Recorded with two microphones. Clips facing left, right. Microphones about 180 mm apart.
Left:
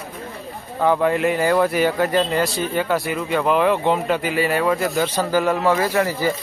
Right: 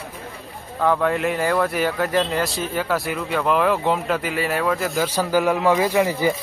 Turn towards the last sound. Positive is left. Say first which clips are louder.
# right 1 dB
turn(degrees=-15)  # may be behind; listen again after turning